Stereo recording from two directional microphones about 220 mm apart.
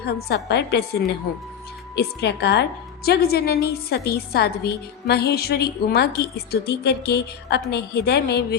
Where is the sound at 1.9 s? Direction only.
50° left (ahead or behind).